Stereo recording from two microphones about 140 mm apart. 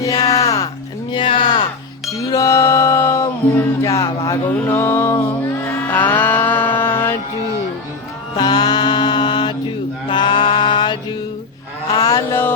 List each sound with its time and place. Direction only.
0.0 s music: 25° left (ahead or behind)
1.1 s a sound: 35° left (ahead or behind)
2.1 s music: 20° left (ahead or behind)
4.4 s mantra: 15° left (ahead or behind)
5.9 s music: 10° left (ahead or behind)
6.7 s mantra: 15° left (ahead or behind)
8.4 s mantra: 30° left (ahead or behind)
11.9 s mantra: 25° left (ahead or behind)